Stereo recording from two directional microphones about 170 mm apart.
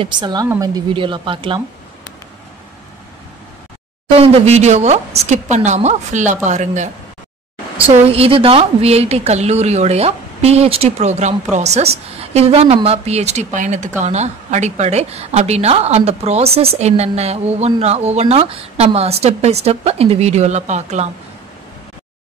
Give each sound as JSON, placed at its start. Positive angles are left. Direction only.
{"t": 0.0, "sound": "speech", "side_deg": -25}
{"t": 4.2, "sound": "a woman's voice", "side_deg": -40}
{"t": 7.7, "sound": "a woman's voice", "side_deg": -35}